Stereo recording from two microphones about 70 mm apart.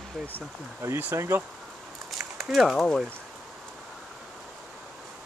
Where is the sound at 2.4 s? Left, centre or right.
Centre.